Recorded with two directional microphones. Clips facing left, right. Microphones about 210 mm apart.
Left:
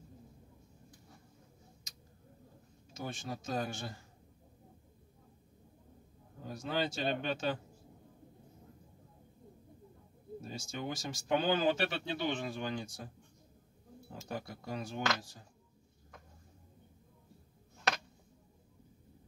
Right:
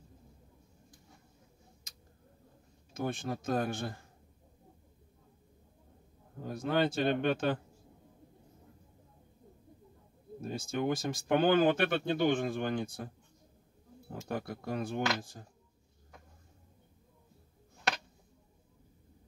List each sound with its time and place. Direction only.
2.9 s speech: 55° right (ahead or behind)
6.4 s speech: 55° right (ahead or behind)
10.4 s speech: 55° right (ahead or behind)
14.2 s speech: 55° right (ahead or behind)